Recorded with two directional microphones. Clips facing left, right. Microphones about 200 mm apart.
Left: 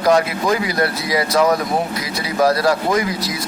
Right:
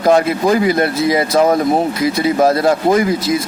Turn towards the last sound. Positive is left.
turn(degrees=-25)  # may be behind; listen again after turning